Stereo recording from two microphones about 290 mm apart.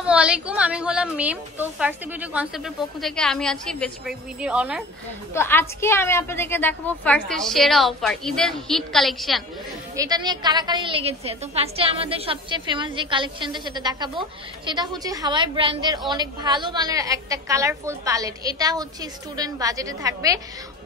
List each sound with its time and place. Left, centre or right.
0.0 s a woman's voice: centre
5.3 s a woman's voice: centre
9.9 s a woman's voice: centre